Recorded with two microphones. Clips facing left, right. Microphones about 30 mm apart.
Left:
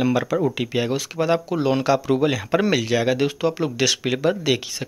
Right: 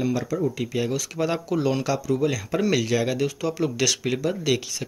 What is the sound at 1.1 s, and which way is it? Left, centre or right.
Speech, left.